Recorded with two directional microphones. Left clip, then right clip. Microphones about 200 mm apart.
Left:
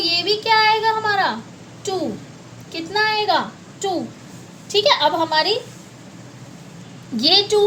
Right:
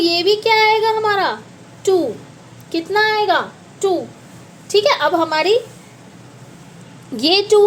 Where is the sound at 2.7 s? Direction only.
25° right (ahead or behind).